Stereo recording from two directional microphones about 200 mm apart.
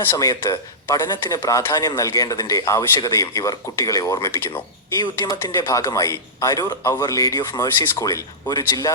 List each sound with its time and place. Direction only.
0.1 s a man's voice: 20° left (ahead or behind)